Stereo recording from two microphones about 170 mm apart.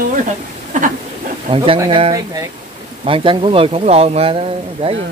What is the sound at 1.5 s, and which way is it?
Speech, 30° right (ahead or behind).